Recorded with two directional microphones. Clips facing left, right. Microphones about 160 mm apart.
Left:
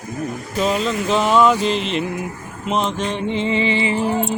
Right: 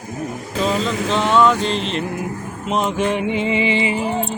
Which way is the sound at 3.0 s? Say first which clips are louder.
Right 2 dB; 10° right (ahead or behind).